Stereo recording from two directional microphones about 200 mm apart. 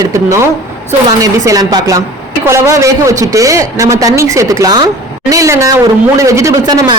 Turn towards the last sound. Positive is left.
turn(degrees=-15)  # may be behind; listen again after turning